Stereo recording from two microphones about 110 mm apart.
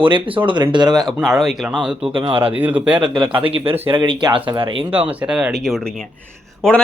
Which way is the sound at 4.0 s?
40° right (ahead or behind).